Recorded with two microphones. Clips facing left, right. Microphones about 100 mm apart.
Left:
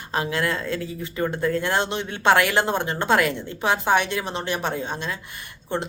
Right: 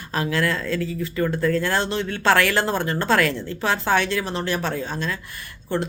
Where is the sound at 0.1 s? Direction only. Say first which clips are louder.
Right 1 dB; 20° left (ahead or behind).